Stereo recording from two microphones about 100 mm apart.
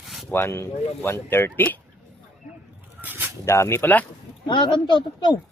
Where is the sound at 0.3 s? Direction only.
25° left (ahead or behind).